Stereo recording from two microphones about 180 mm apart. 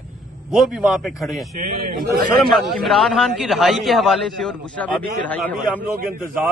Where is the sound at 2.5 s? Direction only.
Centre (ahead or behind).